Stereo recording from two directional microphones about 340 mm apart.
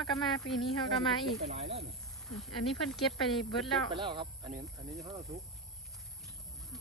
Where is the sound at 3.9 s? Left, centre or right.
Centre.